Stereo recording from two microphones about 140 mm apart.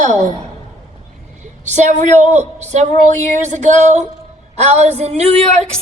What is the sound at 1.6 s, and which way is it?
A woman's voice, 60° right (ahead or behind).